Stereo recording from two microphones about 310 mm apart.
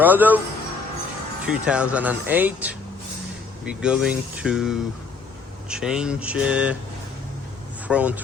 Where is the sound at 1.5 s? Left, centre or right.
Centre.